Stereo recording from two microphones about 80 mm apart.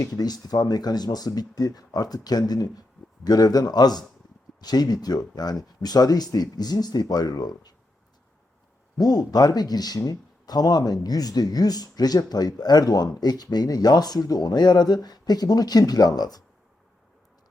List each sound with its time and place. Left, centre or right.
0.0 s speech: left
9.0 s speech: left